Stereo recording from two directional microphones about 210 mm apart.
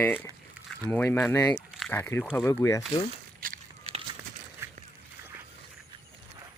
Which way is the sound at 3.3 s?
40° right (ahead or behind).